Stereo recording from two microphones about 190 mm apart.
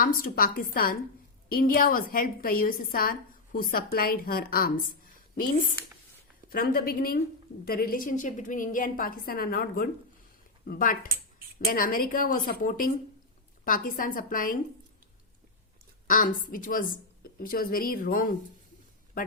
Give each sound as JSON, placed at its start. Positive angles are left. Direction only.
{"t": 0.0, "sound": "a woman's voice", "side_deg": 50}
{"t": 16.0, "sound": "a woman's voice", "side_deg": 45}